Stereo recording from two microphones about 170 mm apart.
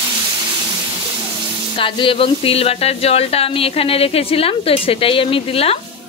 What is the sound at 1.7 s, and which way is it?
Speech, 30° left (ahead or behind).